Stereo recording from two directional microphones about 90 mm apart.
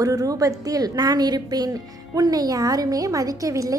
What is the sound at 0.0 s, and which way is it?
A woman's voice, 40° right (ahead or behind).